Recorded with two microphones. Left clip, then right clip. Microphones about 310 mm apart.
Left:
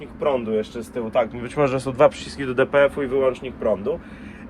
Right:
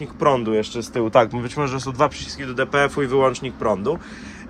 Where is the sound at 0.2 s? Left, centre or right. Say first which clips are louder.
Right 3 dB; right.